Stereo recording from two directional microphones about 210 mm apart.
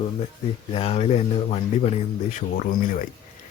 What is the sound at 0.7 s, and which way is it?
Speech, 30° left (ahead or behind).